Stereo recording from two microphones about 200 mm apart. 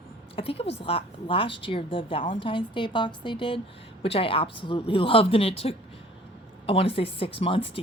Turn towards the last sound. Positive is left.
turn(degrees=25)  # may be behind; listen again after turning